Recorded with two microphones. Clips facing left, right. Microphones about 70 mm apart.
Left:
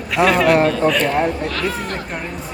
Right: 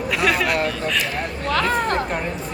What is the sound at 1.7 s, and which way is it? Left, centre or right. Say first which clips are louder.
Speech: right 5 dB; right.